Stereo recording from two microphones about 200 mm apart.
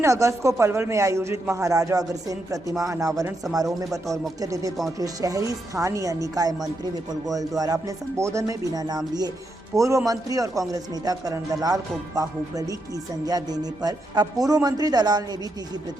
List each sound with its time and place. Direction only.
0.0 s speech: 15° right (ahead or behind)